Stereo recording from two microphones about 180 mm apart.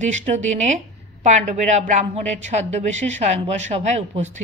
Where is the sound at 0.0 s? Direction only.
40° right (ahead or behind).